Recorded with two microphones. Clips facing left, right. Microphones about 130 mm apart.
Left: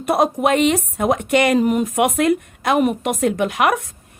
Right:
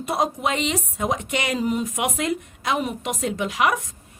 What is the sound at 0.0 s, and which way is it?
A woman's voice, 60° left (ahead or behind).